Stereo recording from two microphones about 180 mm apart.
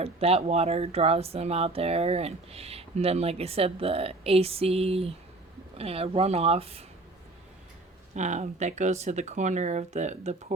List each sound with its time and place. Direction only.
0.0 s speech: 35° right (ahead or behind)
8.1 s speech: 40° right (ahead or behind)